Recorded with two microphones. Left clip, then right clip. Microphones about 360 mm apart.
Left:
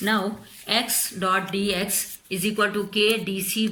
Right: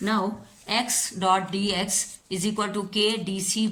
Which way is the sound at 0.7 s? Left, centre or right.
Right.